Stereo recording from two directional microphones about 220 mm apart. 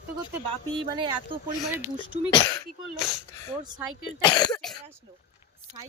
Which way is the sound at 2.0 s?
20° left (ahead or behind).